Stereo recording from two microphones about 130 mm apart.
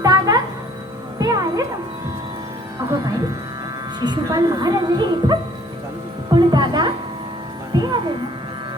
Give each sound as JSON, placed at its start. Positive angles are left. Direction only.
{"t": 0.0, "sound": "music", "side_deg": -30}
{"t": 2.9, "sound": "speech", "side_deg": -30}
{"t": 6.3, "sound": "music", "side_deg": -35}